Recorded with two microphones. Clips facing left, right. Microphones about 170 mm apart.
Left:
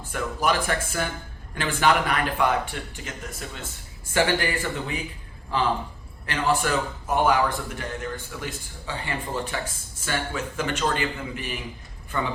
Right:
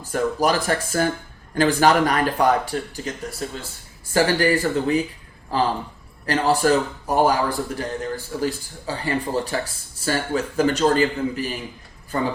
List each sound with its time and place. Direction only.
0.1 s a man's voice: 40° right (ahead or behind)